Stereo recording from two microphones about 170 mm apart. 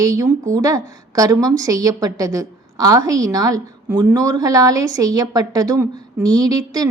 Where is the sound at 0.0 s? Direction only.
20° right (ahead or behind).